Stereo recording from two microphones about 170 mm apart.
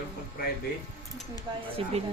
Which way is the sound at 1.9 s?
35° right (ahead or behind).